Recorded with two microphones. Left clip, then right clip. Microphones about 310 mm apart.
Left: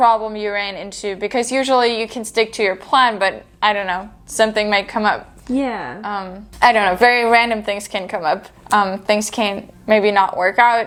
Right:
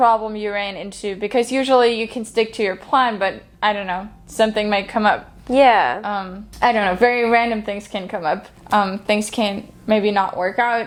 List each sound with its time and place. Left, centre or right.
0.0 s a woman's voice: left
5.5 s a woman's voice: right
6.0 s a woman's voice: left
6.6 s a woman's voice: left